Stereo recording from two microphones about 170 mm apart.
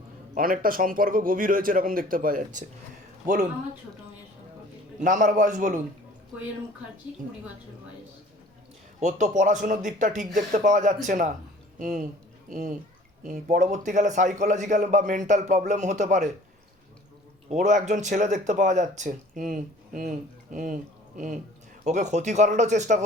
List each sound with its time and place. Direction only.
0.3 s speech: 55° right (ahead or behind)
4.9 s speech: 50° right (ahead or behind)
9.0 s speech: 45° right (ahead or behind)
17.5 s speech: 45° right (ahead or behind)